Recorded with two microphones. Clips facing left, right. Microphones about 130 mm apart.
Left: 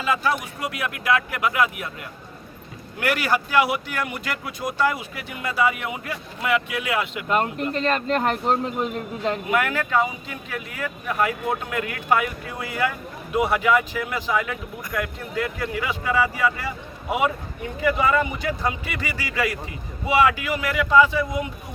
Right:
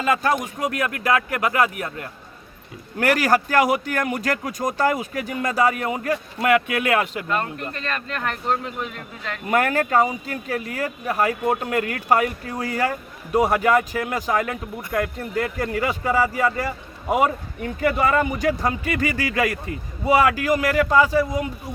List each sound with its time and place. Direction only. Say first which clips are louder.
0.0 s speech: right 3 dB; 45° right (ahead or behind)
7.7 s speech: left 7 dB; 25° left (ahead or behind)
9.5 s speech: right 6 dB; 40° right (ahead or behind)